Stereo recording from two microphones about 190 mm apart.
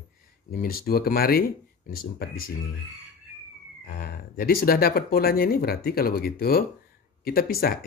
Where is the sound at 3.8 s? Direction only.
50° left (ahead or behind).